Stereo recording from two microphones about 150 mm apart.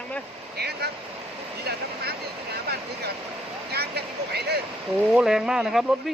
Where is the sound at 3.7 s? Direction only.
90° right.